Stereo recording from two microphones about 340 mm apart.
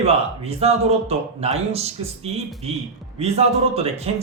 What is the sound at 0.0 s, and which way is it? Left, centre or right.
A man's voice, centre.